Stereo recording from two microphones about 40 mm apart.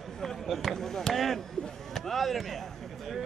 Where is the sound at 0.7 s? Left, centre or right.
Centre.